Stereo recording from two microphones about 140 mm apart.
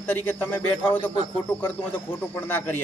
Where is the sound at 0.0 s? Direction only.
15° left (ahead or behind).